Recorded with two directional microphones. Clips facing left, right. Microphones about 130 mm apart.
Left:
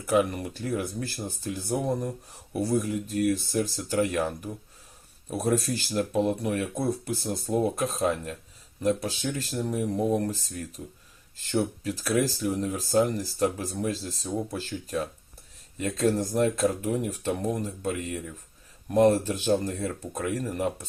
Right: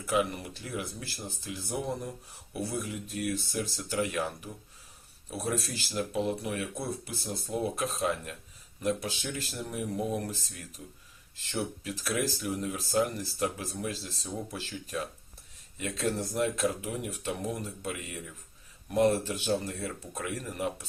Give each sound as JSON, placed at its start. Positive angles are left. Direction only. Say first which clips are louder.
{"t": 0.1, "sound": "speech", "louder": "left 5 dB", "side_deg": 45}
{"t": 16.4, "sound": "speech", "louder": "left 4 dB", "side_deg": 40}